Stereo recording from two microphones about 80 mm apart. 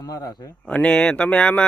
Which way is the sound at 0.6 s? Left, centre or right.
Centre.